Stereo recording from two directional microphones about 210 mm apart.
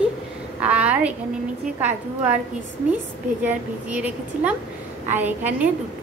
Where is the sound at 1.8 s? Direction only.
10° right (ahead or behind).